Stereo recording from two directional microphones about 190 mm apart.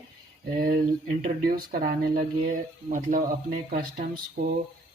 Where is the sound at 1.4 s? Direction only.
50° right (ahead or behind).